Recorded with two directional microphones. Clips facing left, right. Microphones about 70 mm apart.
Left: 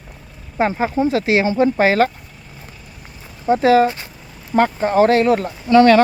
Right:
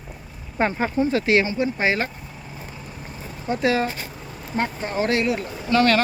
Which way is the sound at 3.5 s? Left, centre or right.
Left.